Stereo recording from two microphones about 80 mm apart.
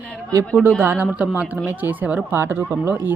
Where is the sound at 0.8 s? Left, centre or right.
Right.